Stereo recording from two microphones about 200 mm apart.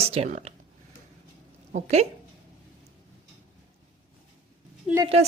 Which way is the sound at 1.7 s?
35° right (ahead or behind).